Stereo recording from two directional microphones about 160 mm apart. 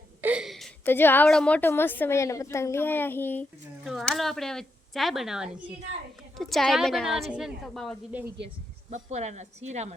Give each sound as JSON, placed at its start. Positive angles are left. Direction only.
{"t": 0.2, "sound": "a sound", "side_deg": -10}
{"t": 0.9, "sound": "a woman's voice", "side_deg": 15}
{"t": 3.8, "sound": "speech", "side_deg": 0}
{"t": 8.9, "sound": "speech", "side_deg": -45}